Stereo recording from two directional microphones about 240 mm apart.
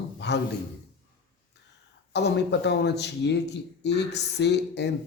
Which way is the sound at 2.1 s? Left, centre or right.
Left.